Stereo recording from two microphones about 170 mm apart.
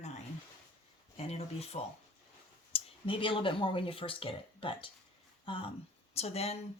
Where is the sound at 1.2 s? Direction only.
35° left (ahead or behind).